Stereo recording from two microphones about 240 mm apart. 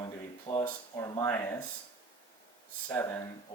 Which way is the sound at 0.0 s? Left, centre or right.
Centre.